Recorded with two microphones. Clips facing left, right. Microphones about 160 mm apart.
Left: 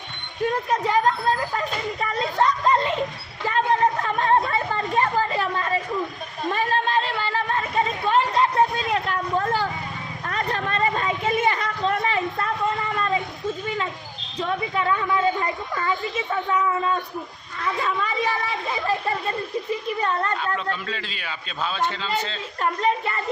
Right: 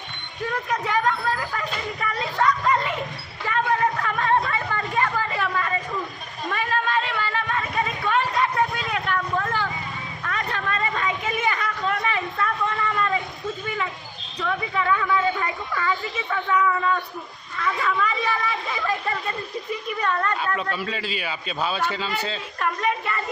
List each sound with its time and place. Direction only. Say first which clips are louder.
0.4 s speech: left 4 dB; 30° left (ahead or behind)
3.4 s a sound: left 2 dB; 30° left (ahead or behind)
14.3 s a sound: left 1 dB; 30° left (ahead or behind)
17.7 s speech: even; 30° left (ahead or behind)
20.6 s a man's voice: right 1 dB; 10° right (ahead or behind)
22.6 s speech: left 2 dB; 30° left (ahead or behind)